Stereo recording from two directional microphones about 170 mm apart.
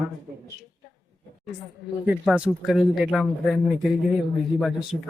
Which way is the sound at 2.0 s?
5° right (ahead or behind).